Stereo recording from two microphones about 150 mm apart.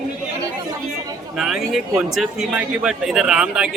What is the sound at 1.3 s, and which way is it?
A man's voice, centre (ahead or behind).